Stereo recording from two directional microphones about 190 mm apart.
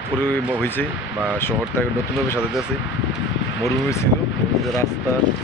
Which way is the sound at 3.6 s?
15° left (ahead or behind).